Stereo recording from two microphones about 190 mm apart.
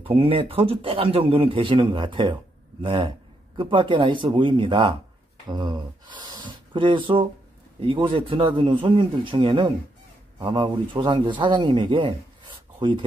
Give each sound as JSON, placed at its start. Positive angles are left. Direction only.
{"t": 0.0, "sound": "a man's voice", "side_deg": -30}